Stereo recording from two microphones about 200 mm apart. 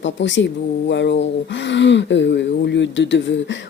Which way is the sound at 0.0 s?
65° left (ahead or behind).